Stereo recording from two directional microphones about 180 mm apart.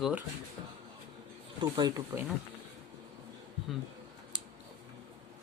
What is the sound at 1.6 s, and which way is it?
Speech, 20° right (ahead or behind).